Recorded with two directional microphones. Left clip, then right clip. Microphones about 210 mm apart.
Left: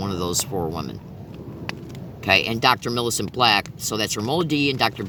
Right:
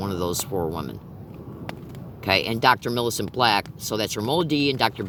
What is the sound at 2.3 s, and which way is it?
Speech, 30° right (ahead or behind).